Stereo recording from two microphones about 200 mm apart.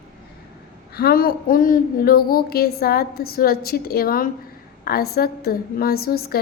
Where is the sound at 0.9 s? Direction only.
50° left (ahead or behind).